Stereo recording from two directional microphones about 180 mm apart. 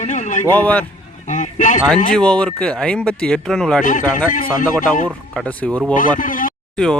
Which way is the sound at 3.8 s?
45° left (ahead or behind).